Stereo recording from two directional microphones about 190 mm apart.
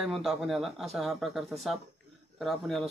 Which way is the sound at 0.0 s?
Centre (ahead or behind).